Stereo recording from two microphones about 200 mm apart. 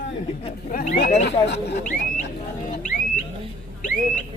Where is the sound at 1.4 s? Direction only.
55° left (ahead or behind).